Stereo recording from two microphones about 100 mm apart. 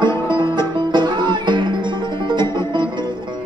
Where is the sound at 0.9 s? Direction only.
50° right (ahead or behind).